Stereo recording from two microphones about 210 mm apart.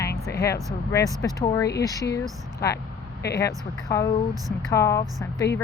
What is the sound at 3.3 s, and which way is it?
Speech, 15° left (ahead or behind).